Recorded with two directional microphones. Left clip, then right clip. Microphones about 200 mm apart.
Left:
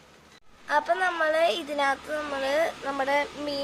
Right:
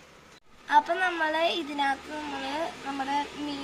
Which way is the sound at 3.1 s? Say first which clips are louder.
Left 3 dB; 50° left (ahead or behind).